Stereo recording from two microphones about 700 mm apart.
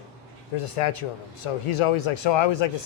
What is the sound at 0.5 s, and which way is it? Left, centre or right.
A man's voice, left.